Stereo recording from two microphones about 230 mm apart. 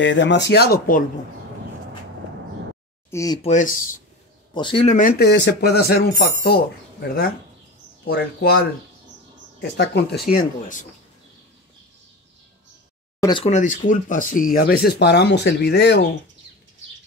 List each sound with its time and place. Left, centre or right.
0.0 s speech: left
3.1 s speech: centre
3.4 s speech: left
4.6 s speech: left
10.3 s speech: left
13.2 s speech: left